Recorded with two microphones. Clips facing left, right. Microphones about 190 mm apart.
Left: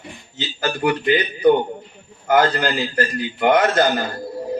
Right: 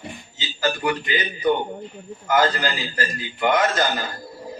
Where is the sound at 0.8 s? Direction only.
60° left (ahead or behind).